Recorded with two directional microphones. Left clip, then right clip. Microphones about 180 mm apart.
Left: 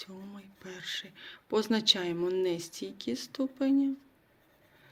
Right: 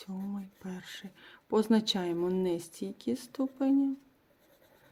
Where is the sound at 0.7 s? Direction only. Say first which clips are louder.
Left 8 dB; 45° right (ahead or behind).